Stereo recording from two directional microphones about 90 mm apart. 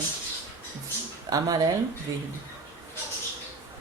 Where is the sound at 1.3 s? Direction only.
40° right (ahead or behind).